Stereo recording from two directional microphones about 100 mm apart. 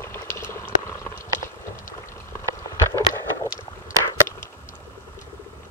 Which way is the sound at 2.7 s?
30° left (ahead or behind).